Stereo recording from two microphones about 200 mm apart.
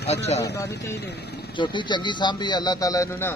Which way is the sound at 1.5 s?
25° left (ahead or behind).